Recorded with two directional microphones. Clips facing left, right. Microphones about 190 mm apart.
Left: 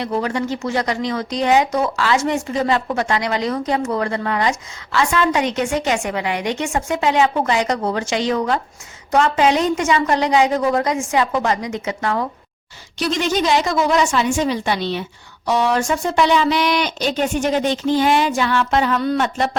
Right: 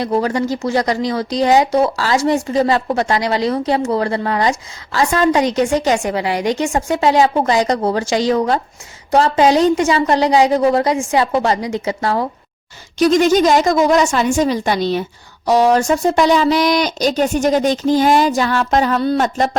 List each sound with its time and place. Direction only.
0.0 s speech: 35° right (ahead or behind)
13.0 s a woman's voice: 45° right (ahead or behind)